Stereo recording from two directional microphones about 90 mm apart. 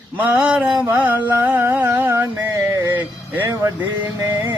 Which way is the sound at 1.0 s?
20° right (ahead or behind).